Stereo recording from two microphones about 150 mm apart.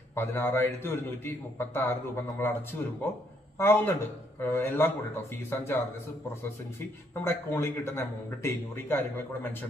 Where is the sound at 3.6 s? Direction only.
15° left (ahead or behind).